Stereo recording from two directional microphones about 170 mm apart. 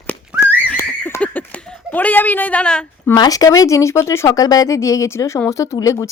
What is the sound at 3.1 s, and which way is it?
Speech, 20° left (ahead or behind).